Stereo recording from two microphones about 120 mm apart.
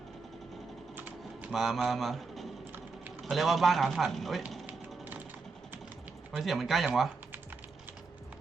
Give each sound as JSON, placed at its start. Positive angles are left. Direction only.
{"t": 0.9, "sound": "typing", "side_deg": -15}
{"t": 1.5, "sound": "speech", "side_deg": 0}
{"t": 4.6, "sound": "a sound", "side_deg": -15}
{"t": 6.3, "sound": "speech", "side_deg": 0}